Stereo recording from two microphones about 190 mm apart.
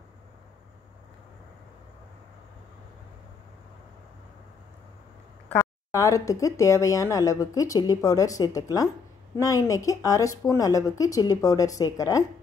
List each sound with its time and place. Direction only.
5.5 s speech: 15° left (ahead or behind)